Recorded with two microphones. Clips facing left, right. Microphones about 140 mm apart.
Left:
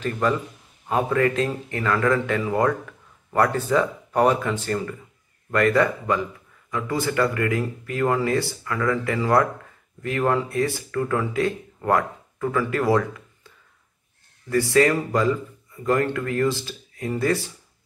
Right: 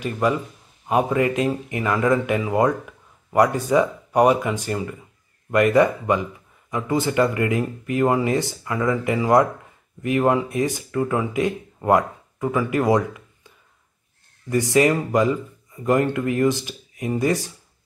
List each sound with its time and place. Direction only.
0.0 s speech: 10° right (ahead or behind)
14.5 s speech: 20° right (ahead or behind)